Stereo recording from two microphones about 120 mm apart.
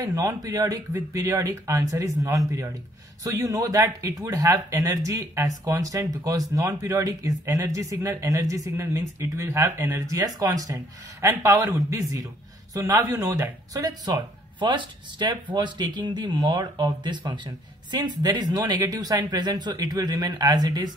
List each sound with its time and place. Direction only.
0.0 s speech: 30° right (ahead or behind)